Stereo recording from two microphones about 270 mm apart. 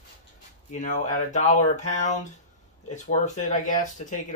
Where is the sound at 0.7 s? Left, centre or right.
Left.